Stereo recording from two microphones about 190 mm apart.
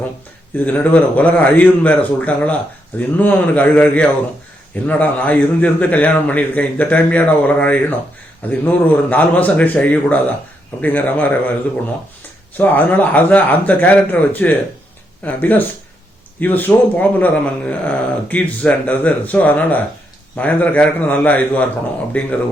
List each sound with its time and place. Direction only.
0.5 s speech: 10° left (ahead or behind)
12.5 s speech: 10° left (ahead or behind)